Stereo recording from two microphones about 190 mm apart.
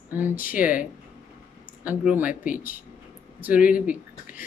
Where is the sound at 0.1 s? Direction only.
10° right (ahead or behind).